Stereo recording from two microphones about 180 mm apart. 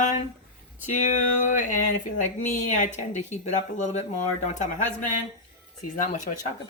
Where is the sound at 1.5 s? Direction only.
45° left (ahead or behind).